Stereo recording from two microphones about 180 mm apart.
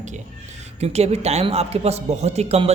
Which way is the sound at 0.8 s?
35° right (ahead or behind).